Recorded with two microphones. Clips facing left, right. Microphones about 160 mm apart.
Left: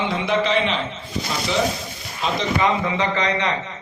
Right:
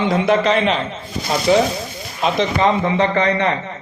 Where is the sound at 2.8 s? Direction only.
55° right (ahead or behind).